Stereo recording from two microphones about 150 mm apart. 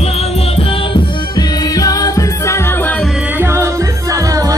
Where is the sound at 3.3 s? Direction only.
15° right (ahead or behind).